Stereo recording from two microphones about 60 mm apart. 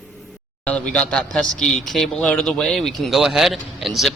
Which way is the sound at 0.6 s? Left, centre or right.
Left.